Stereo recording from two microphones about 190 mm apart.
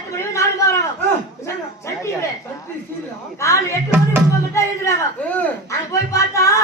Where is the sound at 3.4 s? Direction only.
15° left (ahead or behind).